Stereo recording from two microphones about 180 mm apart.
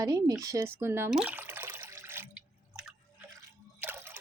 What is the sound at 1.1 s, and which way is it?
Water, 5° right (ahead or behind).